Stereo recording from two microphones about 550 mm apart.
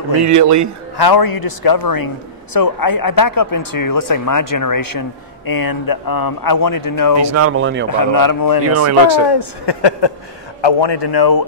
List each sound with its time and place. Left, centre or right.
0.3 s a man's voice: right
0.9 s speech: left
7.2 s speech: right
7.9 s speech: left
8.6 s speech: right
9.3 s speech: left